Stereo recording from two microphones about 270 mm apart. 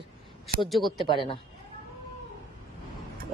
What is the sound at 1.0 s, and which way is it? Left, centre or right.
Speech, centre.